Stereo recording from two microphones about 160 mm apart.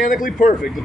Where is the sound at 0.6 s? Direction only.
Centre (ahead or behind).